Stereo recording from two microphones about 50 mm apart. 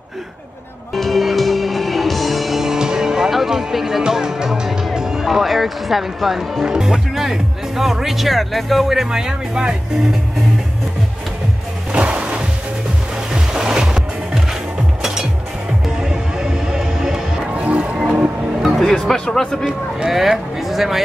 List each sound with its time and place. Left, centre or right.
0.9 s music: centre
4.0 s speech: centre
6.6 s speech: centre
11.9 s music: right
17.6 s music: right
18.8 s speech: centre
20.1 s speech: centre